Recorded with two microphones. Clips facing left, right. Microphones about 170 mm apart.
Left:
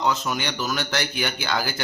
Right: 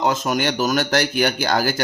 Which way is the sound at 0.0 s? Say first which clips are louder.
Right 5 dB; 50° right (ahead or behind).